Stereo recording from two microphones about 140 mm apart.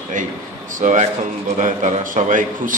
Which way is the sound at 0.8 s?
60° right (ahead or behind).